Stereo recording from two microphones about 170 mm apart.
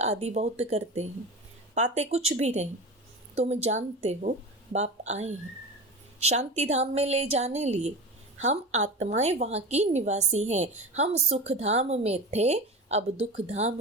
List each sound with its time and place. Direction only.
0.0 s a woman's voice: 40° right (ahead or behind)